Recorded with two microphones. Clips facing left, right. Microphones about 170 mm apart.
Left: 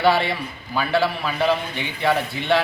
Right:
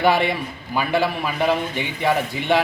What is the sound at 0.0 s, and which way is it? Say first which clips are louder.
A man's voice: right 1 dB; 15° right (ahead or behind).